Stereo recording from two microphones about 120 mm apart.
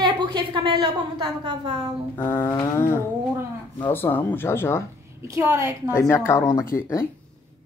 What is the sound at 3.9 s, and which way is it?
Speech, 15° left (ahead or behind).